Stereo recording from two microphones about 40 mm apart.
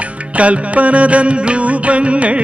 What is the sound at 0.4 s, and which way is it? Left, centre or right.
Music, right.